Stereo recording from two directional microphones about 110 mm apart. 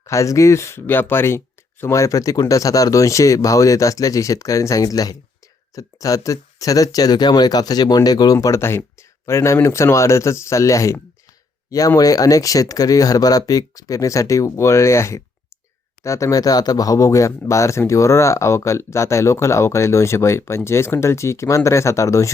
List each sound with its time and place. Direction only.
0.0 s speech: 30° left (ahead or behind)